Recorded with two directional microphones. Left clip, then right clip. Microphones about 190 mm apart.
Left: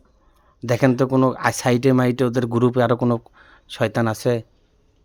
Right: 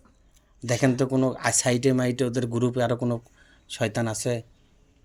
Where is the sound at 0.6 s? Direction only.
50° left (ahead or behind).